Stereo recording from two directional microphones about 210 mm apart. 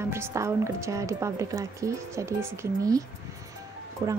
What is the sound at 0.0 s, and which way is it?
A woman's voice, 10° right (ahead or behind).